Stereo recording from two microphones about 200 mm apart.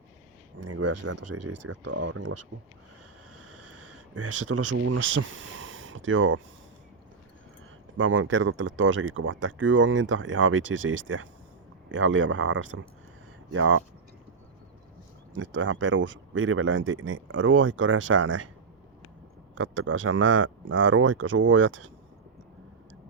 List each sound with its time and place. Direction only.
0.6 s a sound: 70° right (ahead or behind)
1.0 s speech: 70° right (ahead or behind)
4.7 s speech: 80° right
7.9 s speech: 75° right (ahead or behind)
15.4 s speech: 70° right (ahead or behind)
19.5 s speech: 75° right (ahead or behind)